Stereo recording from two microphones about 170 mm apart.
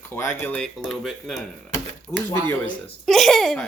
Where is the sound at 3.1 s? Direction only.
Centre (ahead or behind).